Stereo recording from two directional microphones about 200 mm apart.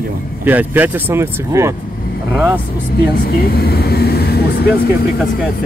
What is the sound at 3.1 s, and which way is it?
Speech, 50° left (ahead or behind).